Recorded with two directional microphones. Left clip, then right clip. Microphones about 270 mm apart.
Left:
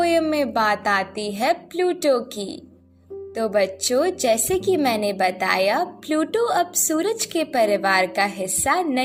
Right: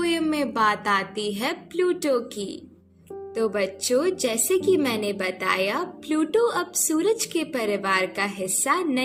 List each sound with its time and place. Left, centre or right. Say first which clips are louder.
0.0 s a woman's voice: left 5 dB; centre